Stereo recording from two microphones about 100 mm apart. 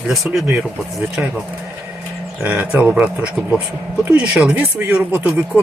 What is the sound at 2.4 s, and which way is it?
Speech, 15° right (ahead or behind).